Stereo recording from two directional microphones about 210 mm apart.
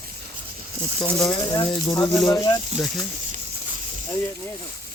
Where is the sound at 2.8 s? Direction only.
Centre (ahead or behind).